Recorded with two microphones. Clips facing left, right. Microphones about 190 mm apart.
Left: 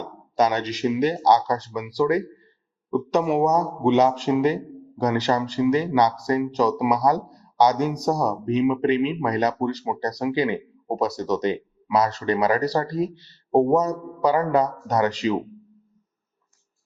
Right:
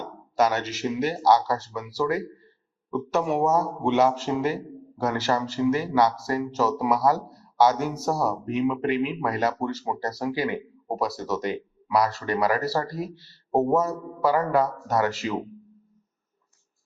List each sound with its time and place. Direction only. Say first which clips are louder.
0.3 s speech: left 2 dB; 20° left (ahead or behind)